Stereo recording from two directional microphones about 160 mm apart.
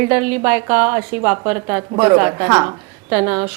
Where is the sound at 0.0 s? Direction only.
10° right (ahead or behind).